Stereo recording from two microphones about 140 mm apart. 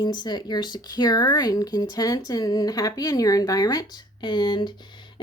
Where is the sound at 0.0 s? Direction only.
30° left (ahead or behind).